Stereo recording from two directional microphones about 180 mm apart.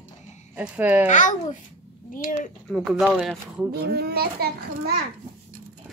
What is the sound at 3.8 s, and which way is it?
A child's voice, 60° right (ahead or behind).